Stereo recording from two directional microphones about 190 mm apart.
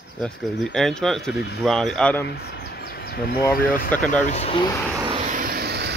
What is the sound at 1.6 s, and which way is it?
Speech, centre (ahead or behind).